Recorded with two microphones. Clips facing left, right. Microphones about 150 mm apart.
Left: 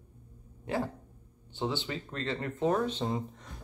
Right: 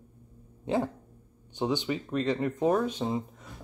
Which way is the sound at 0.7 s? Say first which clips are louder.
Right 4 dB; 20° right (ahead or behind).